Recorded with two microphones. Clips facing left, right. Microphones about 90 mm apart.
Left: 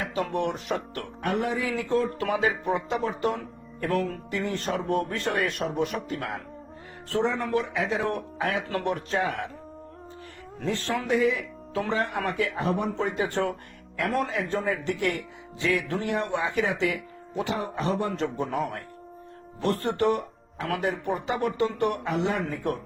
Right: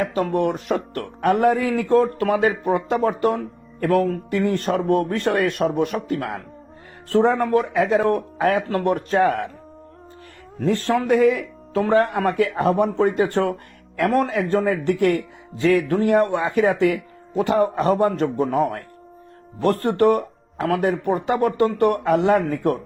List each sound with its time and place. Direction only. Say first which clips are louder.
0.0 s speech: right 7 dB; 45° right (ahead or behind)
10.7 s speech: right 8 dB; 50° right (ahead or behind)
15.6 s speech: right 9 dB; 45° right (ahead or behind)